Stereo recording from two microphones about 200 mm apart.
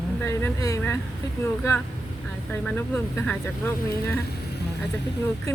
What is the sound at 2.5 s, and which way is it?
Speech, 10° left (ahead or behind).